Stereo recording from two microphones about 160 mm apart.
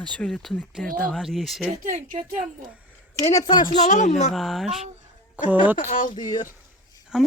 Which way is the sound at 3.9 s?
50° left (ahead or behind).